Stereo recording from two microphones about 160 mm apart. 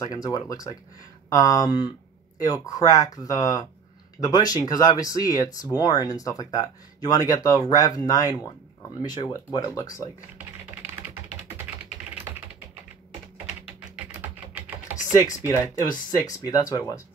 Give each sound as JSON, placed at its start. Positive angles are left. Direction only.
{"t": 0.0, "sound": "speech", "side_deg": 25}
{"t": 15.1, "sound": "speech", "side_deg": 20}